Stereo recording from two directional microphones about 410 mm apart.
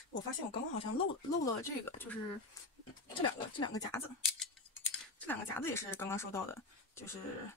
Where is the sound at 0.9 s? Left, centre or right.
Centre.